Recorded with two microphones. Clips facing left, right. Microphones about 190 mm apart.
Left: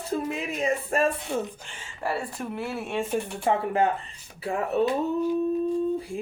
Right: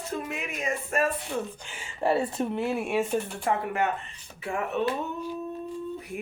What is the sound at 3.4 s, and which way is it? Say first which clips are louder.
A woman's voice: left 7 dB; 25° left (ahead or behind).